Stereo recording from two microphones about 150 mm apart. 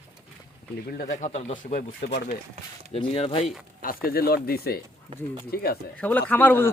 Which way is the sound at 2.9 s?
40° left (ahead or behind).